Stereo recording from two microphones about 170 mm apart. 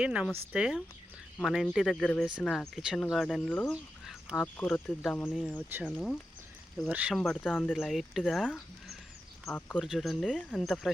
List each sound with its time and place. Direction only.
0.0 s speech: 5° right (ahead or behind)
5.3 s speech: 5° right (ahead or behind)
7.2 s speech: 5° left (ahead or behind)